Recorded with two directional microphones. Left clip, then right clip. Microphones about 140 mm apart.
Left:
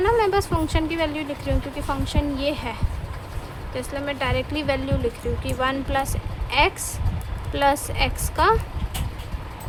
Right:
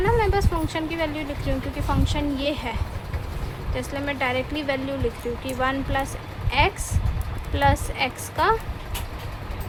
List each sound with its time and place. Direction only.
0.0 s speech: 25° left (ahead or behind)
3.8 s a woman's voice: 15° left (ahead or behind)